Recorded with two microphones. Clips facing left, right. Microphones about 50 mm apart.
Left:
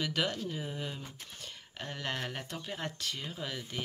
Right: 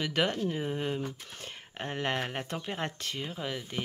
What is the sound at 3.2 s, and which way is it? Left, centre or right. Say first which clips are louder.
Speech: right 4 dB; centre.